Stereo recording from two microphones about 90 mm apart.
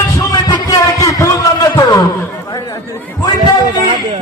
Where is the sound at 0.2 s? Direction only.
45° left (ahead or behind).